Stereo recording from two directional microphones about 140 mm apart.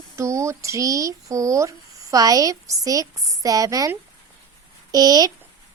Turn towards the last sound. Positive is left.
turn(degrees=-25)  # may be behind; listen again after turning